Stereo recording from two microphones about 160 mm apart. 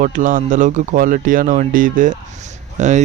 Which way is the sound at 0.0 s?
55° right (ahead or behind).